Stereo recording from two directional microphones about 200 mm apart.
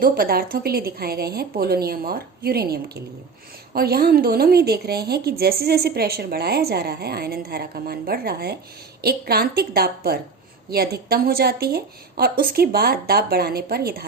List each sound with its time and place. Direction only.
0.0 s a woman's voice: 50° right (ahead or behind)